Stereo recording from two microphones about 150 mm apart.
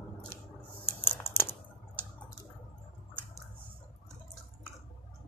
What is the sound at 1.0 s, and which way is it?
Crumpling, 15° left (ahead or behind).